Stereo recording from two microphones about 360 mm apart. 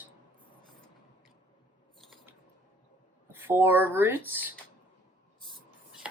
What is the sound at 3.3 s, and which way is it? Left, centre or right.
Speech, centre.